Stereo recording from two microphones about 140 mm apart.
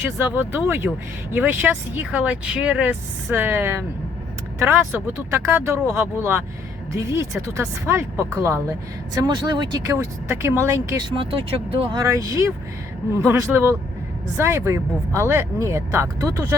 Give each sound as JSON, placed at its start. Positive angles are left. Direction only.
{"t": 0.3, "sound": "speech", "side_deg": -15}
{"t": 9.2, "sound": "speech", "side_deg": -30}
{"t": 9.9, "sound": "speech", "side_deg": -20}
{"t": 11.0, "sound": "speech", "side_deg": -40}
{"t": 12.0, "sound": "speech", "side_deg": -25}